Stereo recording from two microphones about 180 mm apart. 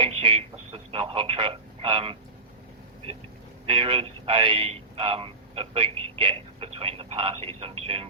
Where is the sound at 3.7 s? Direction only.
30° right (ahead or behind).